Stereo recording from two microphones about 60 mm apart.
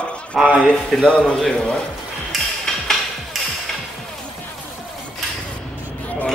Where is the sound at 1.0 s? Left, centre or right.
Centre.